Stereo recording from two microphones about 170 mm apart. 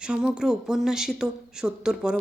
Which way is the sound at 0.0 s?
5° right (ahead or behind).